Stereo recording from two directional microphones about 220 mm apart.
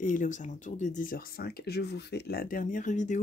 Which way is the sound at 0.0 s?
35° left (ahead or behind).